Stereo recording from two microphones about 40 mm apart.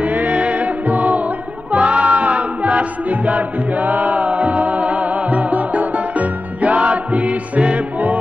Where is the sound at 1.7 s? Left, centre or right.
Right.